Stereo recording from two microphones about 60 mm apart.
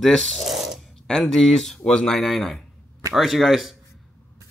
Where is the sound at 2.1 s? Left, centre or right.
Centre.